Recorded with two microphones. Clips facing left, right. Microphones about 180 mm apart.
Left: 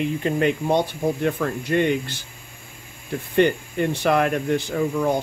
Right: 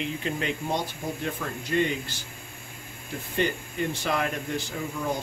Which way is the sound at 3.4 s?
60° left (ahead or behind).